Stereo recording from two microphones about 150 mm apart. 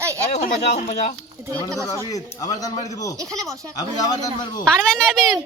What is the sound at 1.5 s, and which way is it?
Speech, 20° right (ahead or behind).